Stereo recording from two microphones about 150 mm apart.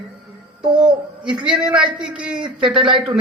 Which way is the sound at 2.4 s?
35° right (ahead or behind).